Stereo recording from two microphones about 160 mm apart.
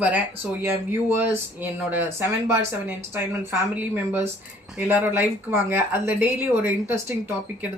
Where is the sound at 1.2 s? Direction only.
10° right (ahead or behind).